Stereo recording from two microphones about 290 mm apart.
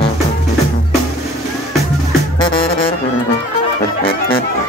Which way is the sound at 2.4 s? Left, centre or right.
Centre.